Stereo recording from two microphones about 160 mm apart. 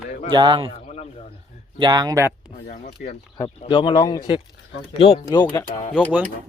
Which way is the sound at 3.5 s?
30° left (ahead or behind).